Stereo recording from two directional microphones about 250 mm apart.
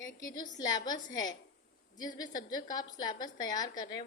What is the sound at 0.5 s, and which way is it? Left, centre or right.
A woman's voice, centre.